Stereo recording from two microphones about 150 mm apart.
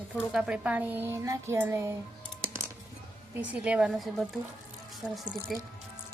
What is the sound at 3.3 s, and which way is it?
Speech, 10° right (ahead or behind).